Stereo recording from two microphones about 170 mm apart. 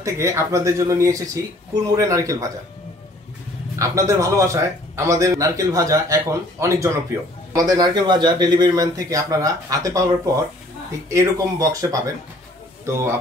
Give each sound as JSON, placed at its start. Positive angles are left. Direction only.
{"t": 0.0, "sound": "a man's voice", "side_deg": -15}
{"t": 3.7, "sound": "a man's voice", "side_deg": -20}